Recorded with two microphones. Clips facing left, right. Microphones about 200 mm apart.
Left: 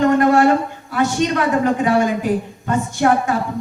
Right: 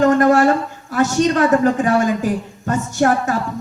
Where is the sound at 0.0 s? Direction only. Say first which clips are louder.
Right 1 dB; 45° right (ahead or behind).